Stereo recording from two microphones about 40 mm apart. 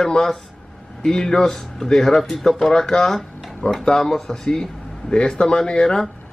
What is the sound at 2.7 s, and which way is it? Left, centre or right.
Speech, centre.